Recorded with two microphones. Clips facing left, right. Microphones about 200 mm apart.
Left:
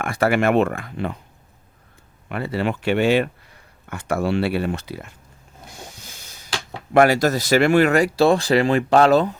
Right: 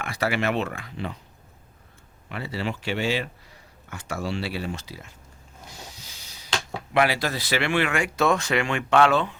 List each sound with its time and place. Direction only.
0.0 s speech: 50° left (ahead or behind)
2.3 s speech: 55° left (ahead or behind)
5.7 s snort: 50° left (ahead or behind)
6.9 s speech: 45° left (ahead or behind)